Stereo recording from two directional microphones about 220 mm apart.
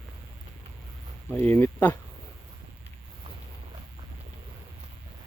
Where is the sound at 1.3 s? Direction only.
10° left (ahead or behind).